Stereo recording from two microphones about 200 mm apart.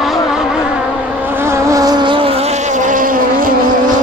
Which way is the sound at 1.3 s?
10° right (ahead or behind).